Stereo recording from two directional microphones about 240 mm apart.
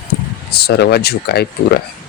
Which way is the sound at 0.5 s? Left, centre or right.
Left.